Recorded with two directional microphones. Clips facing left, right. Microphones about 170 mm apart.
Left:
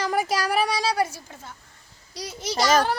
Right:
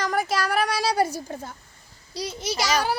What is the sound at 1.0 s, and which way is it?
A woman's voice, 35° right (ahead or behind).